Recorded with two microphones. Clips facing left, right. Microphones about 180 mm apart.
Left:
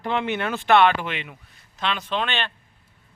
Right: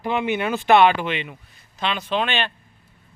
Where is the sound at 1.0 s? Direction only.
Centre (ahead or behind).